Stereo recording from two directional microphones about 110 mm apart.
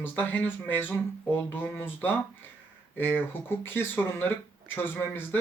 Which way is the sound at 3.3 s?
20° left (ahead or behind).